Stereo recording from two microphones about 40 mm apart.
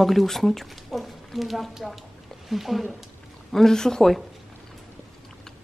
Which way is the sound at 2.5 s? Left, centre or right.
Centre.